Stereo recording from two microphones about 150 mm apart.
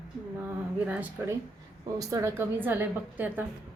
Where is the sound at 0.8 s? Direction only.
10° right (ahead or behind).